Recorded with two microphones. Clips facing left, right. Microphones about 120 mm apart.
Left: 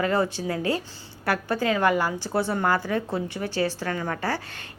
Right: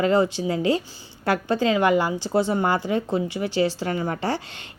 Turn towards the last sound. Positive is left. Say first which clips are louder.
# right 3 dB
turn(degrees=-25)  # may be behind; listen again after turning